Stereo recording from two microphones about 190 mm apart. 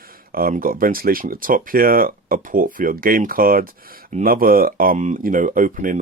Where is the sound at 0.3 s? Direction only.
50° right (ahead or behind).